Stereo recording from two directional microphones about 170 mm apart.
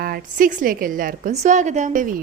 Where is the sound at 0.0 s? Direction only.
55° right (ahead or behind).